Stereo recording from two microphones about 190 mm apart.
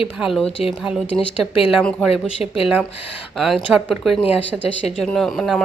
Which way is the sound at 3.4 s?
Centre (ahead or behind).